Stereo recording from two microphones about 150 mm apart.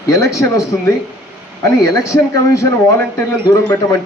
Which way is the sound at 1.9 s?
25° left (ahead or behind).